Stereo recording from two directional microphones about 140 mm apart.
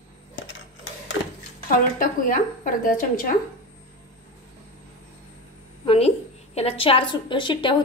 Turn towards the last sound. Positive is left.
turn(degrees=35)  # may be behind; listen again after turning